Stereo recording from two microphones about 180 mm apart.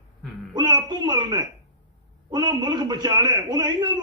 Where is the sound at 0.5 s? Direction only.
25° right (ahead or behind).